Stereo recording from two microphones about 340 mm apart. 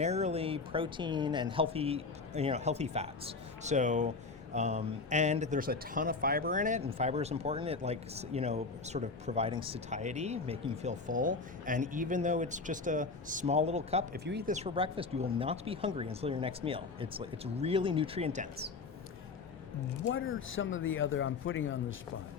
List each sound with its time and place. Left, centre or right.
0.0 s speech: centre
20.1 s speech: left